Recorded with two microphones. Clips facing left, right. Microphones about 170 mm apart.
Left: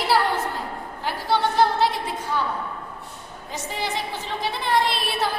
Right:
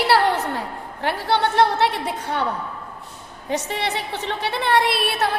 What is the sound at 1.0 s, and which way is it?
A woman's voice, 65° right (ahead or behind).